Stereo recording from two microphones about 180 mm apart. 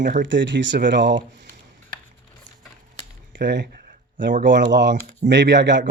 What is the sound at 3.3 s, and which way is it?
A man's voice, 75° right (ahead or behind).